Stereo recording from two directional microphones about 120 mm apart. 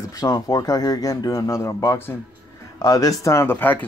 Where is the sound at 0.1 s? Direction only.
30° left (ahead or behind).